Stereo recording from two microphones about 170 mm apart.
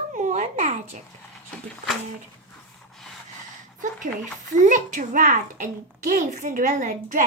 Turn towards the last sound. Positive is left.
turn(degrees=-50)  # may be behind; listen again after turning